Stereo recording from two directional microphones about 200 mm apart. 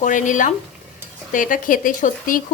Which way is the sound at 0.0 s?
40° left (ahead or behind).